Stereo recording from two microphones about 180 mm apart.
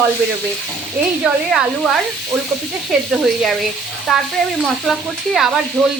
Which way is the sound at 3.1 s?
Centre (ahead or behind).